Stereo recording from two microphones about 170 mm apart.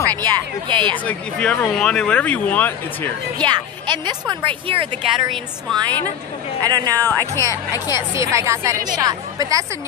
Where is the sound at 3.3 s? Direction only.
25° right (ahead or behind).